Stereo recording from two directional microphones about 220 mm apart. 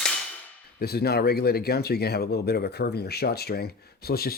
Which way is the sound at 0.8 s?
45° left (ahead or behind).